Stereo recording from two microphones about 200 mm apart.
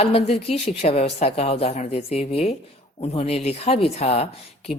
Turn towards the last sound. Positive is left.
turn(degrees=30)  # may be behind; listen again after turning